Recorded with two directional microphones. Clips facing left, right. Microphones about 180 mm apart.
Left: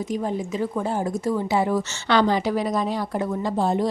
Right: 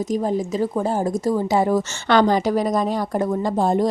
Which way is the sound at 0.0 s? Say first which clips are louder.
Right 4 dB; 40° right (ahead or behind).